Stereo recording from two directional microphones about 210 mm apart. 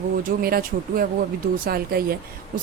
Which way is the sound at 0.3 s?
45° right (ahead or behind).